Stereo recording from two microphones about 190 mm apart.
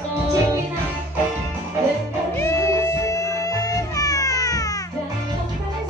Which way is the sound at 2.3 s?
15° left (ahead or behind).